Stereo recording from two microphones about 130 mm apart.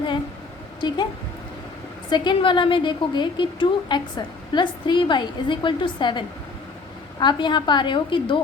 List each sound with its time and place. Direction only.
0.8 s a woman's voice: 35° left (ahead or behind)
2.0 s a woman's voice: 35° left (ahead or behind)